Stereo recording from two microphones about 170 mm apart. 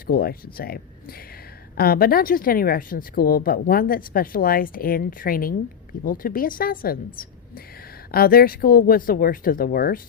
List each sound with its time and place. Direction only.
0.1 s a woman's voice: 60° left (ahead or behind)